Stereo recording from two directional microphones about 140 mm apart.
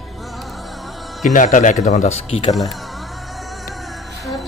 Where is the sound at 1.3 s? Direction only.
65° left (ahead or behind); by 2.4 s 50° left (ahead or behind).